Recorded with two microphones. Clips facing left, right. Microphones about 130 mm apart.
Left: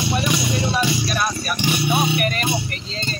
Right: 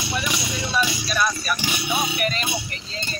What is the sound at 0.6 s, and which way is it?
Music, 25° left (ahead or behind).